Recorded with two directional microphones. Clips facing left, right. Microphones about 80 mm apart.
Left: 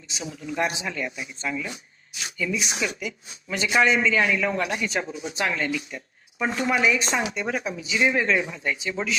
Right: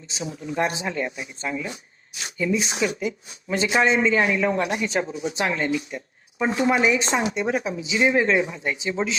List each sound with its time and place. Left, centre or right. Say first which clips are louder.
0.1 s a man's voice: right 2 dB; right